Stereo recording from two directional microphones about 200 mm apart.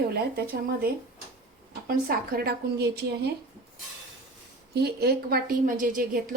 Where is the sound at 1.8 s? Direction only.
45° right (ahead or behind).